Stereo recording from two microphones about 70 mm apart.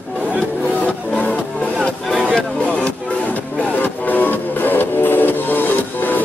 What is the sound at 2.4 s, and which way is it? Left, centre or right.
Music, centre.